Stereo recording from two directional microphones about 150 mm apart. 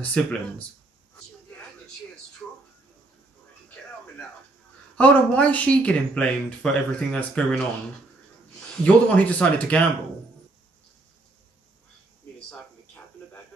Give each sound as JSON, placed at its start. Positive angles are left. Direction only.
{"t": 0.0, "sound": "speech", "side_deg": 10}
{"t": 2.4, "sound": "a sound", "side_deg": 10}
{"t": 4.9, "sound": "speech", "side_deg": 10}